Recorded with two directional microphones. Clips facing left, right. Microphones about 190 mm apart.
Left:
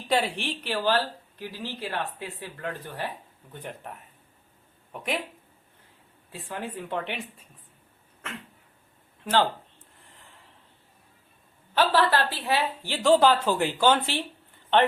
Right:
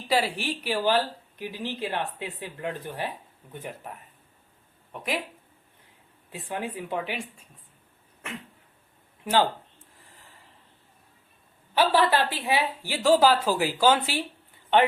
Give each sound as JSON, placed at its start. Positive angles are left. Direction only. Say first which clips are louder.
{"t": 0.1, "sound": "speech", "louder": "even", "side_deg": -5}
{"t": 6.3, "sound": "speech", "louder": "right 2 dB", "side_deg": -15}
{"t": 11.7, "sound": "speech", "louder": "right 1 dB", "side_deg": -10}